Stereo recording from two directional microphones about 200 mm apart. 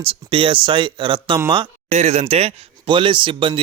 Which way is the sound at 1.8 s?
35° right (ahead or behind).